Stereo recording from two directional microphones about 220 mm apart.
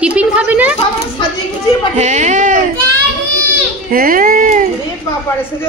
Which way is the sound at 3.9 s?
40° right (ahead or behind).